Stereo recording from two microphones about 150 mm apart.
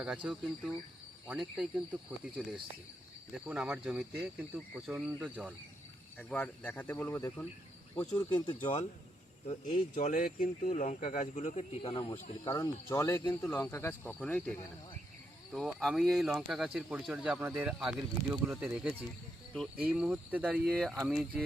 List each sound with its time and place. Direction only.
0.0 s speech: 5° right (ahead or behind)
6.1 s a man's voice: 5° left (ahead or behind)
8.3 s speech: 30° left (ahead or behind)
9.5 s speech: 55° left (ahead or behind); by 12.1 s 40° left (ahead or behind)
12.5 s a man's voice: 20° left (ahead or behind)
15.5 s speech: centre (ahead or behind)